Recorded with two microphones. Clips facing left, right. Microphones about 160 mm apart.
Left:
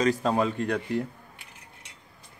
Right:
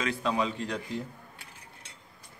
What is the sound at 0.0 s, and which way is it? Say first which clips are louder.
A man's voice: left 5 dB; 40° left (ahead or behind).